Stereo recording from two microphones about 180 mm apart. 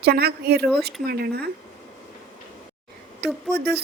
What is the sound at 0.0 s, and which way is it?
A woman's voice, 60° right (ahead or behind).